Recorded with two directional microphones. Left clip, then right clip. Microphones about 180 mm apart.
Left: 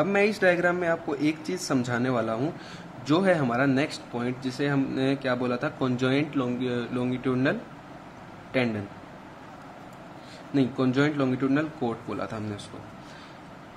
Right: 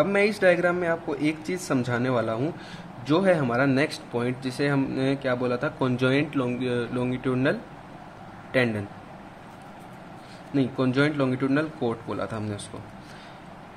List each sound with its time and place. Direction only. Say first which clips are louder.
0.0 s a man's voice: right 2 dB; 10° right (ahead or behind)
10.5 s speech: even; 5° right (ahead or behind)